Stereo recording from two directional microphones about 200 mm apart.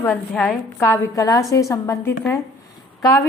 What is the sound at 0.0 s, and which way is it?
A woman's voice, 10° left (ahead or behind).